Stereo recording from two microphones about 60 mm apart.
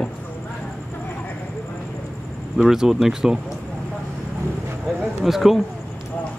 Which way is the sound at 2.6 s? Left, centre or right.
Centre.